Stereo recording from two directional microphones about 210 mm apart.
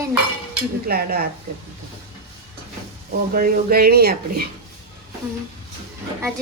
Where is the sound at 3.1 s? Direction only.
45° right (ahead or behind).